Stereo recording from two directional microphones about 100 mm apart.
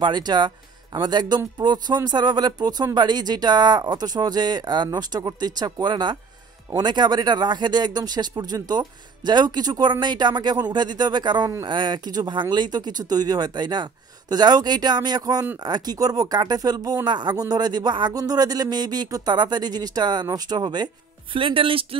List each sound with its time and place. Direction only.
0.0 s speech: 45° right (ahead or behind); by 21.8 s 60° right (ahead or behind)